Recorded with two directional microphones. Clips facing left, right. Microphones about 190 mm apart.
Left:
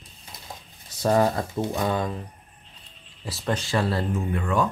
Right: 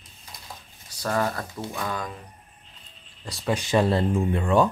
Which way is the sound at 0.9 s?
20° left (ahead or behind).